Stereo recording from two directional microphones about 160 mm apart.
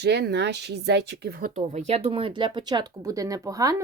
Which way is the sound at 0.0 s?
90° right.